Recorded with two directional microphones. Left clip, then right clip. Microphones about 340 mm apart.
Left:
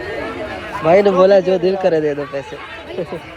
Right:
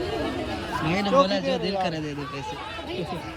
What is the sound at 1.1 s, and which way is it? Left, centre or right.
Speech, centre.